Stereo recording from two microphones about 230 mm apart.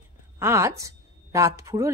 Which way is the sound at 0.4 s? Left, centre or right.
Centre.